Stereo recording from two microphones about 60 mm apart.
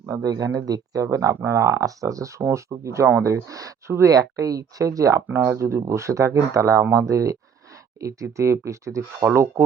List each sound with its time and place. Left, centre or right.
0.1 s speech: right
1.0 s speech: right
2.4 s speech: right
3.5 s speech: right
4.1 s speech: right
5.3 s speech: right
5.5 s speech: right
9.2 s speech: right